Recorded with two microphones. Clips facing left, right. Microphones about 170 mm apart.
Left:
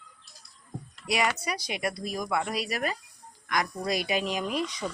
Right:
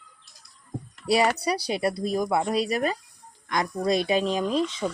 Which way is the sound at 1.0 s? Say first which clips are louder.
Right 6 dB; 30° right (ahead or behind).